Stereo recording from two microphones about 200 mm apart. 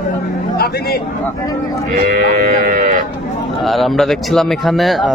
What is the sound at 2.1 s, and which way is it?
Sheep, 45° right (ahead or behind).